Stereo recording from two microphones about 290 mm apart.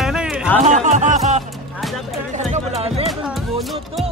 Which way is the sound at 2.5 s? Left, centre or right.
Right.